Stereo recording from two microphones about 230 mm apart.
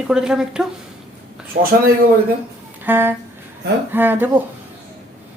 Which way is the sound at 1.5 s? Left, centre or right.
Right.